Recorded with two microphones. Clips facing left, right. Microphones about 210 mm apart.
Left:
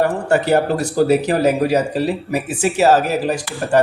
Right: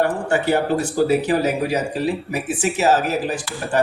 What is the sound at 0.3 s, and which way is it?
Speech, 40° left (ahead or behind).